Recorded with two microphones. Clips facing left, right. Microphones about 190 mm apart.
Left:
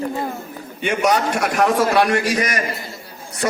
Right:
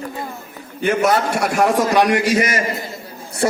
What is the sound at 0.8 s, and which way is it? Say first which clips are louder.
A man's voice: right 2 dB; 5° right (ahead or behind).